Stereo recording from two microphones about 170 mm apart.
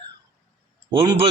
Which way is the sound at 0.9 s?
25° right (ahead or behind).